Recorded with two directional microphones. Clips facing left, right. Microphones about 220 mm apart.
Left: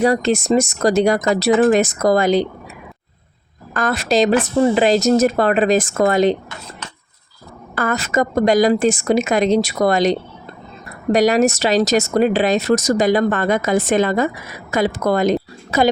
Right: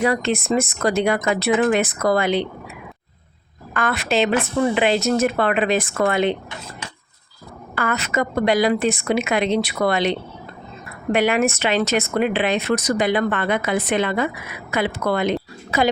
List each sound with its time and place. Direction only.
0.0 s speech: 40° left (ahead or behind)
3.8 s speech: 40° left (ahead or behind)
7.8 s speech: 40° left (ahead or behind)